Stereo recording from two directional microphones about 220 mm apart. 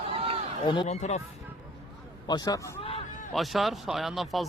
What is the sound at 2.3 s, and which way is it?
Speech, 15° left (ahead or behind).